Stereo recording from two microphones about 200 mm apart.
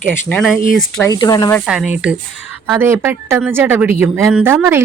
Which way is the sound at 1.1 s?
20° left (ahead or behind).